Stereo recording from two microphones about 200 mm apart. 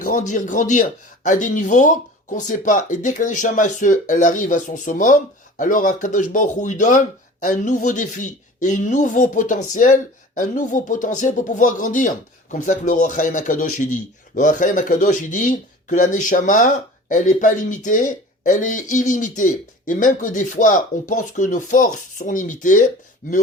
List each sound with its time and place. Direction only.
0.0 s speech: 40° left (ahead or behind)